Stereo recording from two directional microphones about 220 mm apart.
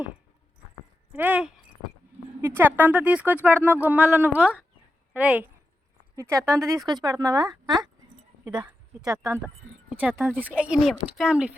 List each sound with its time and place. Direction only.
1.1 s a woman's voice: 5° right (ahead or behind)